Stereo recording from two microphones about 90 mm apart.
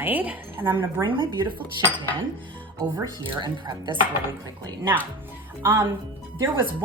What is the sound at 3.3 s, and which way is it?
Speech, 55° right (ahead or behind).